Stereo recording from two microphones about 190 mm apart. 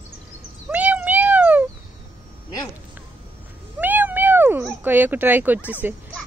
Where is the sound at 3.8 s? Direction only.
10° right (ahead or behind).